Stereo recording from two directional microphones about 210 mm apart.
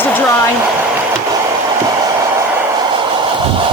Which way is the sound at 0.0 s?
10° left (ahead or behind).